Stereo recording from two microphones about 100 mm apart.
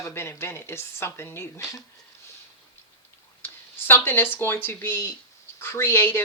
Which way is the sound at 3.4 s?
20° left (ahead or behind).